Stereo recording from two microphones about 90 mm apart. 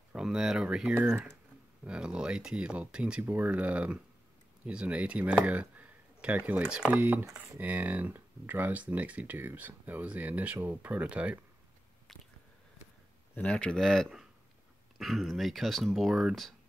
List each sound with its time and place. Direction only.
0.1 s speech: 5° right (ahead or behind)
0.9 s speech: 20° right (ahead or behind)
1.9 s speech: 10° right (ahead or behind)
12.1 s squish: centre (ahead or behind)
13.3 s speech: 15° left (ahead or behind)